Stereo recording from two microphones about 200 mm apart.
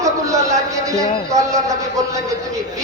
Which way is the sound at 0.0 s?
15° right (ahead or behind).